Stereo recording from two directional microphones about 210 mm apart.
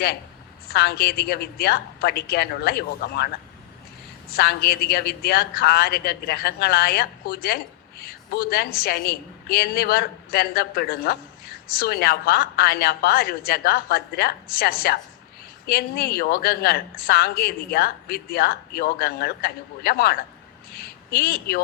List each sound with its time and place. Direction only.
0.7 s speech: 50° left (ahead or behind)
4.4 s speech: 50° left (ahead or behind)